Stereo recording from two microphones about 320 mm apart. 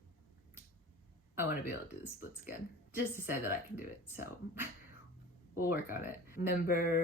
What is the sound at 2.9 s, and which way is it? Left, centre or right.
Speech, centre.